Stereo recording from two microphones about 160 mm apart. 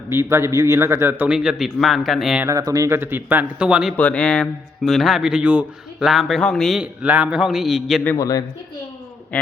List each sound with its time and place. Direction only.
0.1 s a man's voice: 15° right (ahead or behind); by 2.4 s centre (ahead or behind)
2.6 s a man's voice: 20° right (ahead or behind); by 3.9 s 5° right (ahead or behind)
3.9 s speech: 10° left (ahead or behind)
8.0 s speech: 20° left (ahead or behind)
9.3 s speech: 10° left (ahead or behind)